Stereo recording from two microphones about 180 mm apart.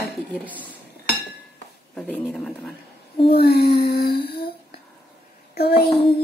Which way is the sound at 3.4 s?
60° left (ahead or behind).